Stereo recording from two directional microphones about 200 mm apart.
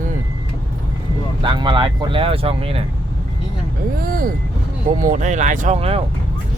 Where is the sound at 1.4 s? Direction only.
25° right (ahead or behind).